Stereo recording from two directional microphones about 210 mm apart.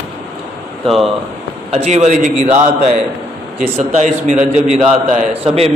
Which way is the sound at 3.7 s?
35° right (ahead or behind).